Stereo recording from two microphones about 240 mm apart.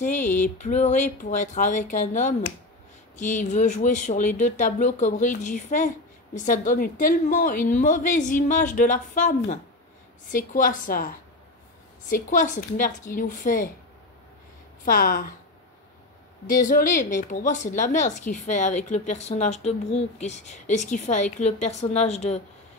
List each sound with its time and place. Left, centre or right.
0.1 s speech: left
14.9 s speech: left
16.4 s speech: left